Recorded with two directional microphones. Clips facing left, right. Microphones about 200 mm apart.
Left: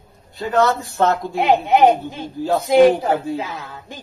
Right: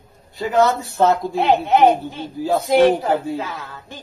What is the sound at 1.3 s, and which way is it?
Speech, 15° left (ahead or behind).